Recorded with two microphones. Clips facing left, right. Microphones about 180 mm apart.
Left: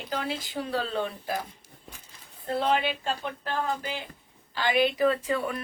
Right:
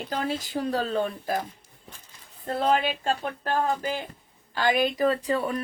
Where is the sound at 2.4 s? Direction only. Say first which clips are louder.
Right 2 dB; 45° right (ahead or behind).